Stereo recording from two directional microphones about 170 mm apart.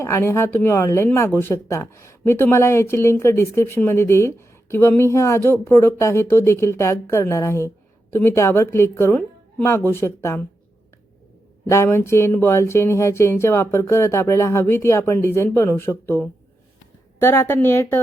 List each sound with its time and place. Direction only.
0.0 s speech: 15° left (ahead or behind)
11.7 s speech: 15° left (ahead or behind)